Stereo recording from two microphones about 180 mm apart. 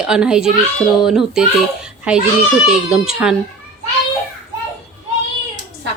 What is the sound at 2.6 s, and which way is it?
Speech, 5° right (ahead or behind).